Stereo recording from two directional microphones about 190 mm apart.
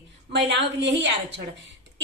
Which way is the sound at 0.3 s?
70° right (ahead or behind).